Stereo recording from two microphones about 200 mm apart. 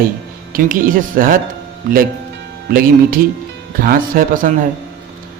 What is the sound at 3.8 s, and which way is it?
Speech, 45° right (ahead or behind).